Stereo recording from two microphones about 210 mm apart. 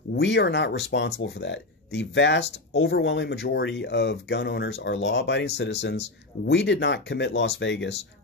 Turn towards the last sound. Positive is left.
turn(degrees=55)  # may be behind; listen again after turning